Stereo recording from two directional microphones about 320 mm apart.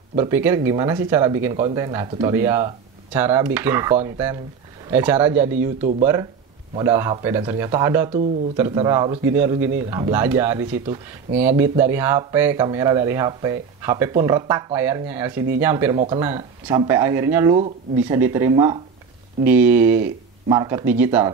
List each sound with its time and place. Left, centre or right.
0.1 s speech: centre
5.8 s speech: right
6.7 s speech: centre